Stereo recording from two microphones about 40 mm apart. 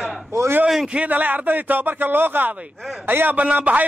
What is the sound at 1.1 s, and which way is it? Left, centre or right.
A man's voice, right.